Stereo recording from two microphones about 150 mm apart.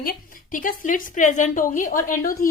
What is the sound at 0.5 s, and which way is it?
A woman's voice, 60° left (ahead or behind).